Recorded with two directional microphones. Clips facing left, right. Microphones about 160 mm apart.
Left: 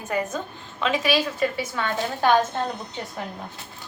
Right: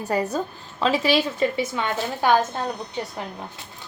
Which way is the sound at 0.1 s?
35° right (ahead or behind).